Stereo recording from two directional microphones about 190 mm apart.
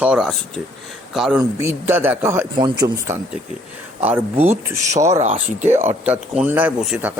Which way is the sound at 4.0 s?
10° right (ahead or behind).